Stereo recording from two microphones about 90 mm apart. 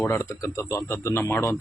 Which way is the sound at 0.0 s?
30° left (ahead or behind).